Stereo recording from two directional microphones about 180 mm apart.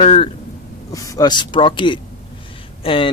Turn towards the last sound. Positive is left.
turn(degrees=30)  # may be behind; listen again after turning